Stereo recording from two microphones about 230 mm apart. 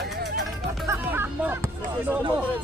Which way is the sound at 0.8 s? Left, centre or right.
Centre.